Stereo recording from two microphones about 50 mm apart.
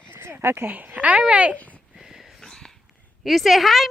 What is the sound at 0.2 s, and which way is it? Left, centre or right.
Speech, right.